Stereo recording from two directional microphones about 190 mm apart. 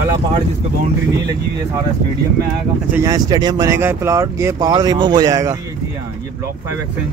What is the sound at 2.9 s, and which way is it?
Speech, 15° right (ahead or behind).